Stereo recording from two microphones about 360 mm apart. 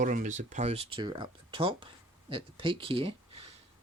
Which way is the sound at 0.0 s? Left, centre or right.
Right.